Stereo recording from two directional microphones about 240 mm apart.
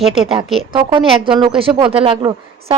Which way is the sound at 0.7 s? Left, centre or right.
Centre.